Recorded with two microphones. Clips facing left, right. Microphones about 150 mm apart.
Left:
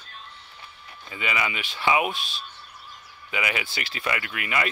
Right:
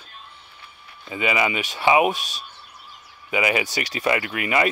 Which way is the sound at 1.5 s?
40° right (ahead or behind).